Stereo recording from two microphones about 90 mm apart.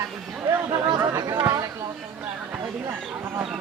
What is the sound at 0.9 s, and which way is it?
Chatter, 30° right (ahead or behind).